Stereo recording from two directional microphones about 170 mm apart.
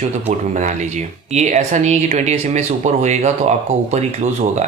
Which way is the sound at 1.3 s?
45° right (ahead or behind).